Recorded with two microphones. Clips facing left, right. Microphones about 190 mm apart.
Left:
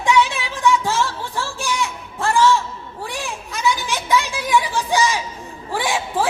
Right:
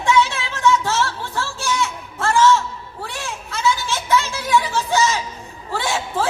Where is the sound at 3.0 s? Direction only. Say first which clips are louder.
Left 2 dB; 15° left (ahead or behind).